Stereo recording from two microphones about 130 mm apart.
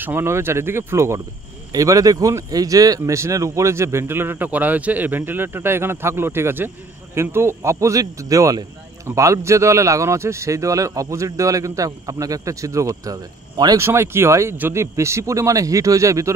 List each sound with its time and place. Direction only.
0.0 s speech: 20° right (ahead or behind)